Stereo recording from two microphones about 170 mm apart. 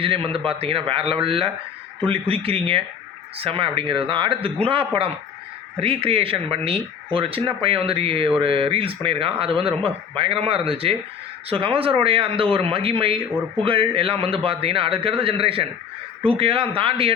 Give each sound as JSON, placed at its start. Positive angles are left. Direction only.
{"t": 0.0, "sound": "speech", "side_deg": -30}